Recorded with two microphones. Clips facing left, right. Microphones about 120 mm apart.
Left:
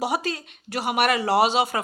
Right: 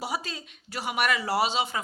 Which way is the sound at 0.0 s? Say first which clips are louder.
Left 7 dB; 70° left (ahead or behind).